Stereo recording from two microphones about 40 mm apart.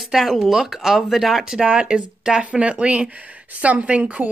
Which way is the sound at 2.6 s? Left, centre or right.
Right.